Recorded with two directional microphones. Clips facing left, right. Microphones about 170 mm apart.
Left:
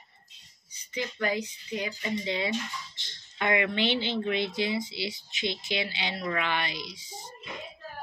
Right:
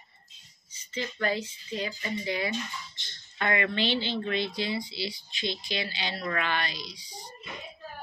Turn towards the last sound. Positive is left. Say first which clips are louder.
# left 1 dB
turn(degrees=20)  # may be behind; listen again after turning